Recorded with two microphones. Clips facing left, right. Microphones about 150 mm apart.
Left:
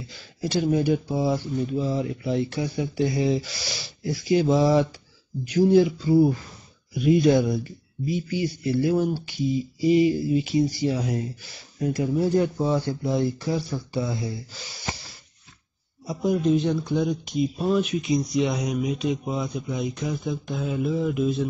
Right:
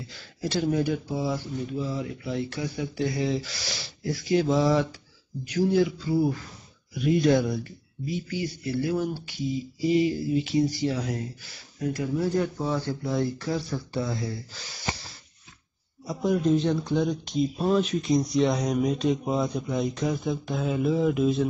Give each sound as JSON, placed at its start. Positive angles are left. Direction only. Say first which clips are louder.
{"t": 0.4, "sound": "speech", "louder": "left 3 dB", "side_deg": 10}
{"t": 7.0, "sound": "speech", "louder": "left 3 dB", "side_deg": 10}
{"t": 16.1, "sound": "speech", "louder": "left 1 dB", "side_deg": 10}